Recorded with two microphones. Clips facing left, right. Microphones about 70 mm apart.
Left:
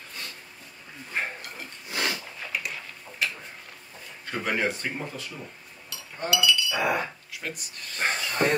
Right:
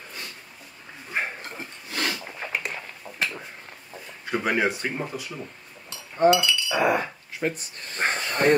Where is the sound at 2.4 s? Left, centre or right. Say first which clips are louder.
Right 3 dB; right.